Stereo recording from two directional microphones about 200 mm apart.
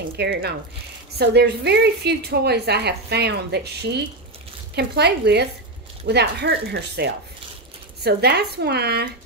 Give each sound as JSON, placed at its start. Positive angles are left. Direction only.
{"t": 0.2, "sound": "a woman's voice", "side_deg": -55}